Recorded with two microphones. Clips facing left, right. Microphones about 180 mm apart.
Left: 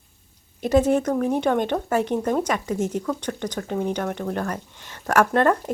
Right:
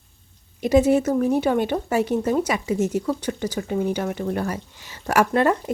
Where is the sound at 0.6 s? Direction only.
10° right (ahead or behind).